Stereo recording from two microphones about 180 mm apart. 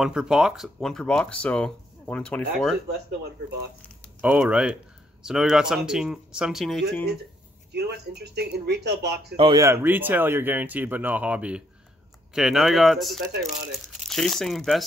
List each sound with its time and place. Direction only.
0.0 s speech: 5° right (ahead or behind)
4.2 s speech: 10° right (ahead or behind)
7.7 s speech: 65° right (ahead or behind)
9.4 s speech: 20° right (ahead or behind); by 14.9 s centre (ahead or behind)